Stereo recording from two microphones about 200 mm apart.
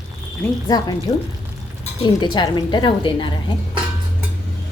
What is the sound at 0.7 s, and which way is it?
Speech, 20° left (ahead or behind).